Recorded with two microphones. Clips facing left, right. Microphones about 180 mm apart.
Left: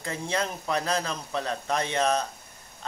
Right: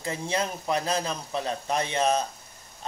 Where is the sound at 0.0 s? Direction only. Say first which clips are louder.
Right 1 dB; 20° right (ahead or behind).